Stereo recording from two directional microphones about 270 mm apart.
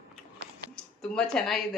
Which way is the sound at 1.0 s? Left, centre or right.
Centre.